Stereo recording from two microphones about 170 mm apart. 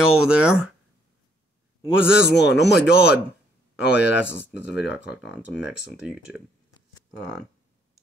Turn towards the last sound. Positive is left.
turn(degrees=-5)  # may be behind; listen again after turning